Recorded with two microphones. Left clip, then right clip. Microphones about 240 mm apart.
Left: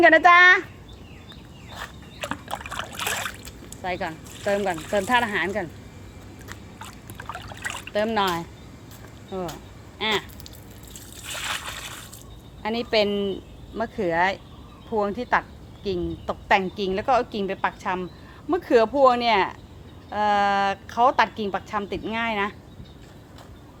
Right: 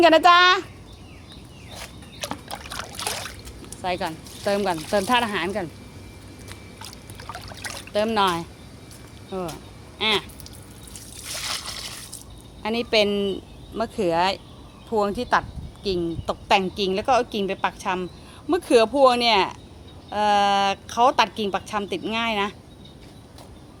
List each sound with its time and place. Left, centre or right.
0.0 s a woman's voice: centre
1.7 s a sound: centre
3.0 s boat: centre
3.8 s a woman's voice: centre
7.3 s a sound: centre
7.9 s a woman's voice: centre
10.0 s a woman's voice: centre
11.2 s a sound: centre
12.6 s a woman's voice: centre
16.6 s a woman's voice: centre
16.9 s a woman's voice: centre